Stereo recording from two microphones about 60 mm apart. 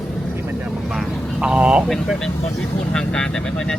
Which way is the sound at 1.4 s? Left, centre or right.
Centre.